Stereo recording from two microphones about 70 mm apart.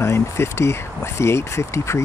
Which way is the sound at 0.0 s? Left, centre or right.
Left.